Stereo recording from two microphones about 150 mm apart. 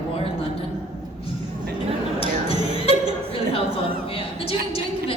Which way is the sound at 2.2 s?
40° left (ahead or behind).